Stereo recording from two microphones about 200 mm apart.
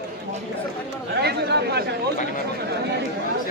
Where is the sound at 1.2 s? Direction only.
55° right (ahead or behind).